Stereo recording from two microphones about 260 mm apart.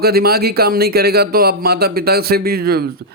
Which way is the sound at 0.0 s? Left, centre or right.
Right.